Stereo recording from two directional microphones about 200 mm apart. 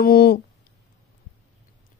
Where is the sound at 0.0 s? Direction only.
50° left (ahead or behind).